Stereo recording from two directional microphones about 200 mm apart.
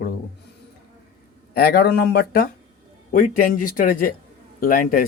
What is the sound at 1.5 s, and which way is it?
Speech, 50° left (ahead or behind).